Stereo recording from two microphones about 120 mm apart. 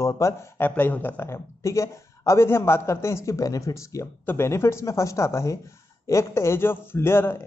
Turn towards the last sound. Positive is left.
turn(degrees=20)  # may be behind; listen again after turning